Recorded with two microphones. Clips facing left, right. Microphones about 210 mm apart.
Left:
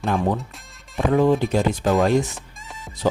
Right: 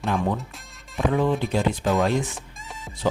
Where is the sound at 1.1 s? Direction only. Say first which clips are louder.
Left 6 dB; 45° left (ahead or behind).